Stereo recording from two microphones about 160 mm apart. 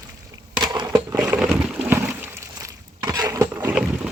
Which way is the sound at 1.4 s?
5° right (ahead or behind).